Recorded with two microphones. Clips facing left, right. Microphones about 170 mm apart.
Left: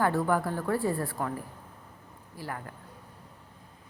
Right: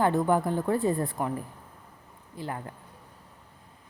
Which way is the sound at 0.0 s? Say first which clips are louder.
Right 2 dB; 20° right (ahead or behind).